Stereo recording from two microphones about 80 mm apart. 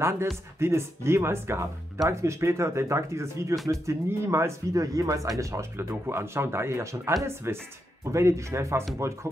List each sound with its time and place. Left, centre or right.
0.6 s speech: right